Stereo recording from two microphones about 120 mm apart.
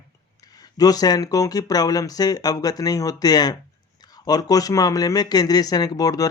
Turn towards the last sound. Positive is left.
turn(degrees=30)  # may be behind; listen again after turning